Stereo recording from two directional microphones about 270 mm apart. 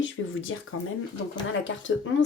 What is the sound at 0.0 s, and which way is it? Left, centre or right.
Speech, left.